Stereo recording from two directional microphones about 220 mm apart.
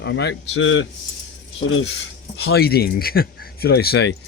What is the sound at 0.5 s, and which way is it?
Speech, 65° left (ahead or behind).